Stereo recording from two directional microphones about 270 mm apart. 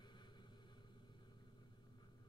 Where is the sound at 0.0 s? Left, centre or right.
Centre.